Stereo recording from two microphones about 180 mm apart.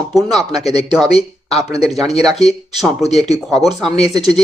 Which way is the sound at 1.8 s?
Centre (ahead or behind).